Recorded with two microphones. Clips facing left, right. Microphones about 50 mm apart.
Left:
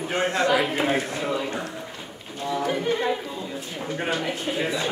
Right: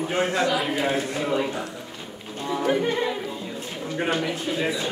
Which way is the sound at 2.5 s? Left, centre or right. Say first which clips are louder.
Right 3 dB; centre.